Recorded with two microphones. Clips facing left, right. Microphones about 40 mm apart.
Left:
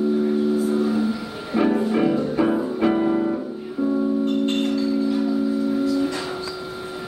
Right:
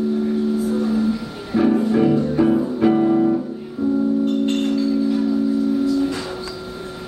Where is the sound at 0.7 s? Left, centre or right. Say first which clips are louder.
Right 1 dB; centre.